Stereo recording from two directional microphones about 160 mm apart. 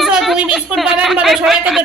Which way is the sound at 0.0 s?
Centre (ahead or behind).